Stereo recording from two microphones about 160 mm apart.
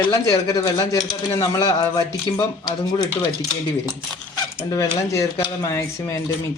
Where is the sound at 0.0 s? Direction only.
25° left (ahead or behind).